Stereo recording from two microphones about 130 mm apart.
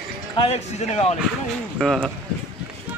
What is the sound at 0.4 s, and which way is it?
Speech, 55° left (ahead or behind).